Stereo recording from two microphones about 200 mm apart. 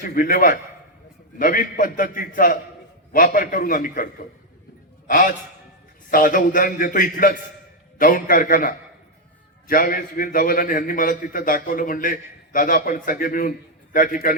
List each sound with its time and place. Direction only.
0.0 s a man's voice: 45° left (ahead or behind)